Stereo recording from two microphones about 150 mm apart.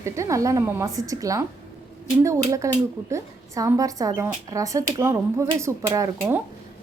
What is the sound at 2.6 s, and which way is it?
A woman's voice, 20° right (ahead or behind).